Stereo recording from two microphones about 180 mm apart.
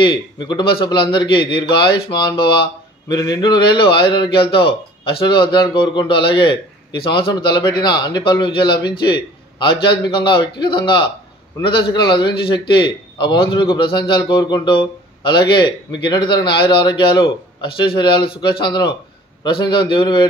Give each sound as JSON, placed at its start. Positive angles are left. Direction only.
{"t": 0.0, "sound": "a man's voice", "side_deg": 25}